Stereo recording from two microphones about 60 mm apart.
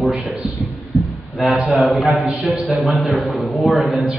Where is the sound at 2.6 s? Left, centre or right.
Right.